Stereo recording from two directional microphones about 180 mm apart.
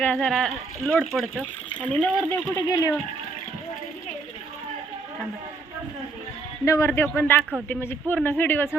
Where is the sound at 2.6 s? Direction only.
15° left (ahead or behind).